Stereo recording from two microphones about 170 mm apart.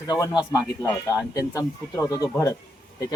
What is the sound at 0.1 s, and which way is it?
Speech, 20° left (ahead or behind).